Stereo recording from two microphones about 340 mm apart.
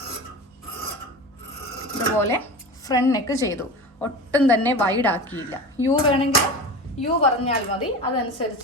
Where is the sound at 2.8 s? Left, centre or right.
Centre.